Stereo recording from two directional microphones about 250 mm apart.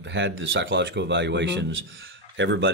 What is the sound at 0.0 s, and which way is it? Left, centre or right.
Speech, right.